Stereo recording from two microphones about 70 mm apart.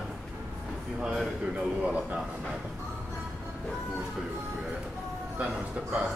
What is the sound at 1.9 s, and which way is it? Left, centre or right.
Speech, centre.